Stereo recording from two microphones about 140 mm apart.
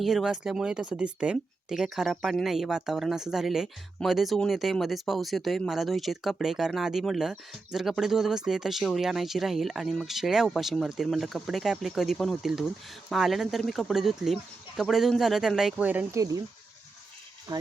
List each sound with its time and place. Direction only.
0.0 s speech: centre (ahead or behind)
17.5 s speech: 30° right (ahead or behind)